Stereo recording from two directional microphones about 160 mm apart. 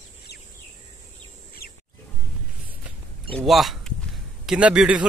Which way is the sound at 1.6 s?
70° left (ahead or behind).